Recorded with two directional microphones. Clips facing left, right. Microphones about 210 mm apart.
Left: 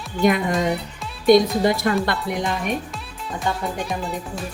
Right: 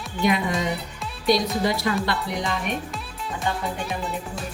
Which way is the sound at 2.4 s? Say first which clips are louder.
Left 3 dB; centre (ahead or behind).